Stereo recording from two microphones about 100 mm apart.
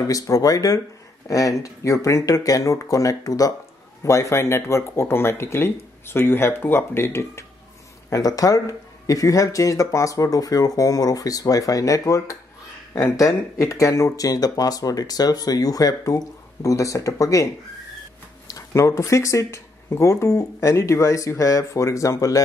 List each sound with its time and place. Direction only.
0.0 s speech: 35° left (ahead or behind)
8.1 s speech: 35° left (ahead or behind)
18.5 s speech: 30° left (ahead or behind)